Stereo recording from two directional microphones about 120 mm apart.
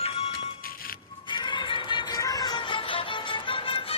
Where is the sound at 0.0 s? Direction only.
55° left (ahead or behind).